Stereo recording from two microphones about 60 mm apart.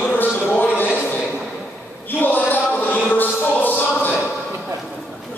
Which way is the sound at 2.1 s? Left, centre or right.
Left.